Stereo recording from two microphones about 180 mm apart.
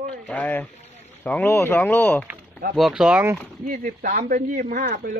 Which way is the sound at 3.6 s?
45° right (ahead or behind).